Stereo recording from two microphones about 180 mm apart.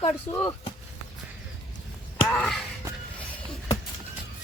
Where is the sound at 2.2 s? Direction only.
10° left (ahead or behind).